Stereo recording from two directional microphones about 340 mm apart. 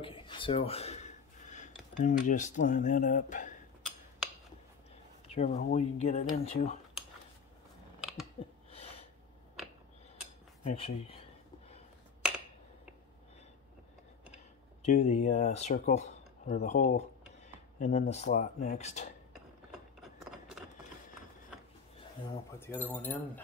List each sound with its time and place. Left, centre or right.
0.0 s speech: centre
5.3 s speech: centre
8.0 s a sound: centre
10.6 s speech: centre
14.8 s speech: centre
19.3 s a sound: centre
22.2 s speech: centre